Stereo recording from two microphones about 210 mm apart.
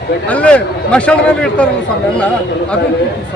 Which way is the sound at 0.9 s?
5° left (ahead or behind).